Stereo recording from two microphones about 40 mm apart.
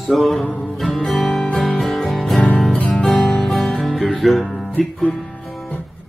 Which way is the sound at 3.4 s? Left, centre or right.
Centre.